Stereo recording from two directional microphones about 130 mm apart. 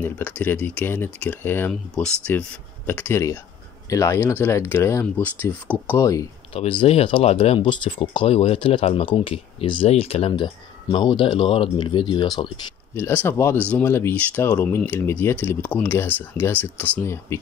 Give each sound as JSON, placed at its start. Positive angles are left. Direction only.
{"t": 0.0, "sound": "speech", "side_deg": 15}
{"t": 5.9, "sound": "speech", "side_deg": 25}
{"t": 6.5, "sound": "speech", "side_deg": 45}
{"t": 12.9, "sound": "speech", "side_deg": 15}